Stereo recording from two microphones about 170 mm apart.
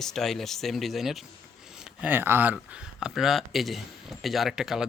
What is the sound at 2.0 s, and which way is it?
Speech, 10° right (ahead or behind).